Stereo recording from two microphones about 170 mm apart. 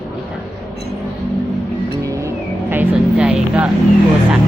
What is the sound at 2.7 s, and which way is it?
Speech, 10° right (ahead or behind).